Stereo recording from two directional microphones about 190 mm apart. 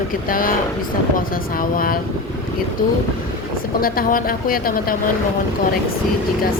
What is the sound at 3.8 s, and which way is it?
Speech, 50° left (ahead or behind).